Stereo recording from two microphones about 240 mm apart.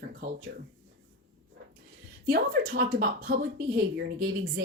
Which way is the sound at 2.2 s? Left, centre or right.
Right.